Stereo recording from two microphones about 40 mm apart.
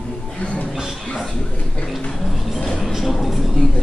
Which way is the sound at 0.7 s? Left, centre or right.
Centre.